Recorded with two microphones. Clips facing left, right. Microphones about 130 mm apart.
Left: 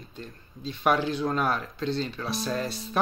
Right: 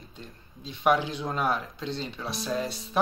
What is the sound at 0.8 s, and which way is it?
Speech, 20° right (ahead or behind).